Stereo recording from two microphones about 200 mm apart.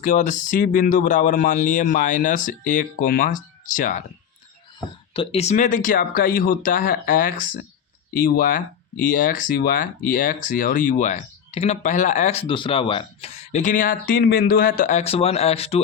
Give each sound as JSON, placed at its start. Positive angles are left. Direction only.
{"t": 0.0, "sound": "speech", "side_deg": 40}
{"t": 5.1, "sound": "speech", "side_deg": 30}